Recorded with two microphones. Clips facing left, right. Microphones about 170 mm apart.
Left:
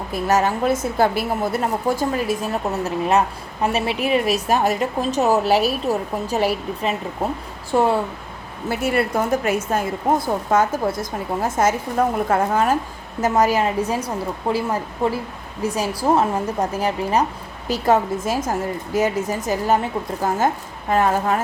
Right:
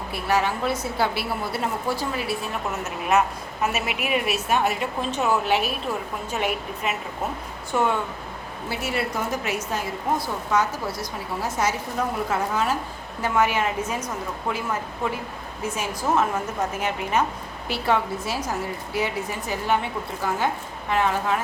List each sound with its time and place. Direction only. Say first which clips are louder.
0.1 s a woman's voice: left 5 dB; 45° left (ahead or behind)
8.7 s a woman's voice: left 7 dB; 55° left (ahead or behind)
13.2 s a woman's voice: left 5 dB; 40° left (ahead or behind)